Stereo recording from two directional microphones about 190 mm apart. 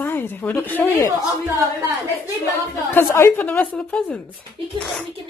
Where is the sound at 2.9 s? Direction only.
10° left (ahead or behind).